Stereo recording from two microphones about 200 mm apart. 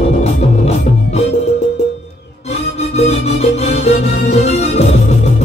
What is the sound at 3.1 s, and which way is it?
Music, 30° left (ahead or behind).